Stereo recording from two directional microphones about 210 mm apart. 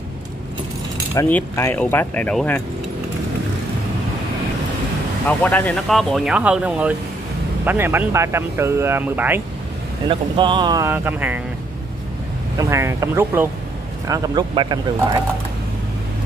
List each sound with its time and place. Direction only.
1.1 s speech: 10° left (ahead or behind)
5.4 s speech: 10° left (ahead or behind); by 9.4 s 10° right (ahead or behind)
10.0 s speech: 25° right (ahead or behind)
12.5 s speech: 15° right (ahead or behind)